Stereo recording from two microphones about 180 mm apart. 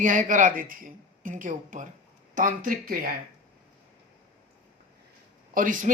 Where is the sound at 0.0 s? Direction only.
45° right (ahead or behind).